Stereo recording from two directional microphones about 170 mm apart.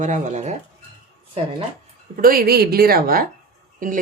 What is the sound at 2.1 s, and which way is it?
Speech, 60° right (ahead or behind).